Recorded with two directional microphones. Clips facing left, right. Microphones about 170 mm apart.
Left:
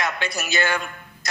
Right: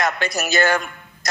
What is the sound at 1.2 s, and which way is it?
Music, 40° right (ahead or behind).